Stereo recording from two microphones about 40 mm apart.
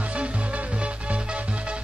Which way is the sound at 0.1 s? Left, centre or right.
Right.